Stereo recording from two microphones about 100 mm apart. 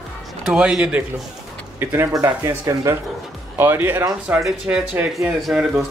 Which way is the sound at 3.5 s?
20° right (ahead or behind).